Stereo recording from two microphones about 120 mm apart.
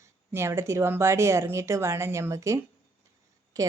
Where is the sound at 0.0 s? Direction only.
20° right (ahead or behind).